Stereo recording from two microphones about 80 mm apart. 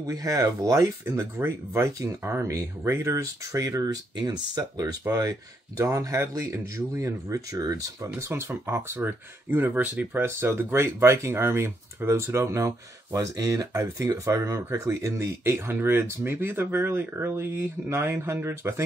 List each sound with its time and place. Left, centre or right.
0.0 s speech: right
8.3 s speech: right